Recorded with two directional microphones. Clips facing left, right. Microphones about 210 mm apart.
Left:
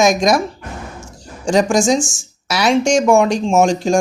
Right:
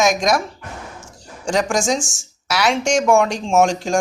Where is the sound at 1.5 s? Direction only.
10° left (ahead or behind).